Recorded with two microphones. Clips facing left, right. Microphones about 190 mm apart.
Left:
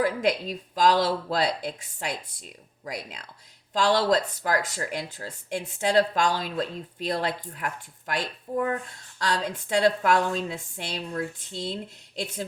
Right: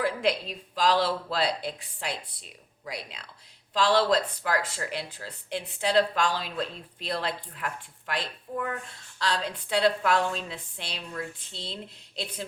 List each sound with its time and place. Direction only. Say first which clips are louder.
0.0 s speech: left 2 dB; 40° left (ahead or behind)